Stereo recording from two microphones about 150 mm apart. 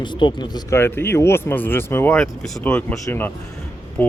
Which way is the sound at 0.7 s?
15° left (ahead or behind).